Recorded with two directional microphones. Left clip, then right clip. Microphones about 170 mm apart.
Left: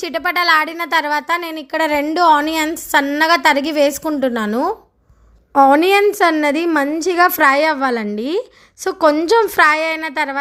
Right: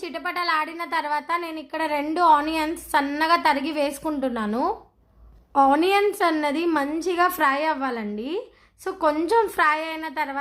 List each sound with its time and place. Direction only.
0.0 s a woman's voice: 35° left (ahead or behind)
5.5 s a woman's voice: 35° left (ahead or behind)